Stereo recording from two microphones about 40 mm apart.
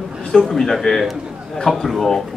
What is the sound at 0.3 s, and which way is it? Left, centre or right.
A man's voice, centre.